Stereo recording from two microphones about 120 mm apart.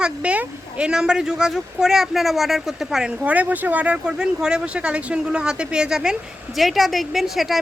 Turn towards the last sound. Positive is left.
turn(degrees=0)  # may be behind; listen again after turning